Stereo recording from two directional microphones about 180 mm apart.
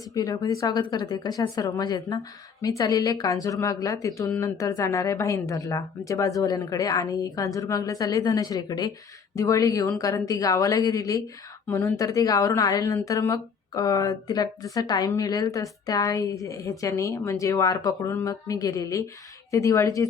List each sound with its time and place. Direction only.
0.1 s a woman's voice: 20° left (ahead or behind)